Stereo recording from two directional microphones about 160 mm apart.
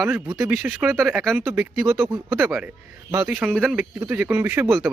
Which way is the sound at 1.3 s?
15° right (ahead or behind).